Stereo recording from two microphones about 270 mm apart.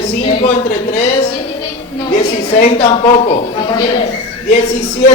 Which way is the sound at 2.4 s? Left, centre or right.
Left.